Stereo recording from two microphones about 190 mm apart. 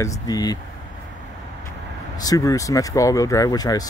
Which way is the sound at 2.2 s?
20° left (ahead or behind).